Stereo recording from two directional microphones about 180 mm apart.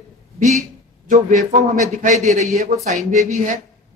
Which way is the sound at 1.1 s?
45° right (ahead or behind).